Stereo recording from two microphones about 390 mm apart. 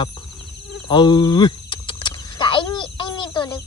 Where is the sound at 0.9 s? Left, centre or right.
Centre.